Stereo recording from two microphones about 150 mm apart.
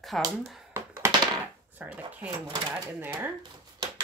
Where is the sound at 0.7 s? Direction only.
20° right (ahead or behind).